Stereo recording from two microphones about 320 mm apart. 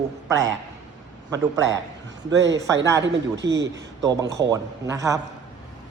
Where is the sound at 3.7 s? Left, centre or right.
Centre.